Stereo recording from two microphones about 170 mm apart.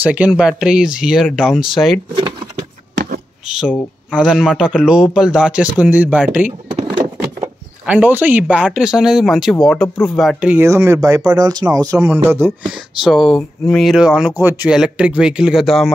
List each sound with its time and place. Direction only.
0.0 s speech: 10° right (ahead or behind)
2.1 s a sound: 30° right (ahead or behind)
3.4 s speech: 5° right (ahead or behind)
3.7 s speech: 10° left (ahead or behind)
4.3 s speech: 5° right (ahead or behind)
6.7 s door: 35° right (ahead or behind)
7.8 s speech: 10° right (ahead or behind)
13.0 s speech: centre (ahead or behind)